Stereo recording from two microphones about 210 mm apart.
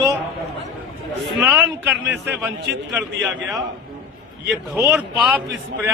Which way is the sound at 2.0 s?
55° right (ahead or behind).